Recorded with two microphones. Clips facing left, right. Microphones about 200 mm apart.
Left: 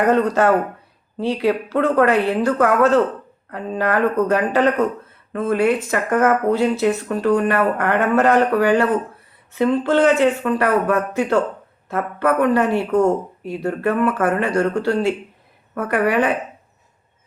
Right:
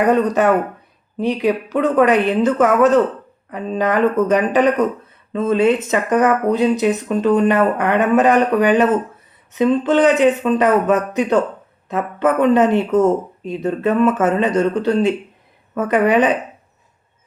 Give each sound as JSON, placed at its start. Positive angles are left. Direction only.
{"t": 0.0, "sound": "a woman's voice", "side_deg": -15}